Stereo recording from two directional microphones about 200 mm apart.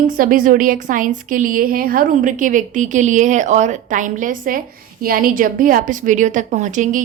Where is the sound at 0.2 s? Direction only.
45° right (ahead or behind).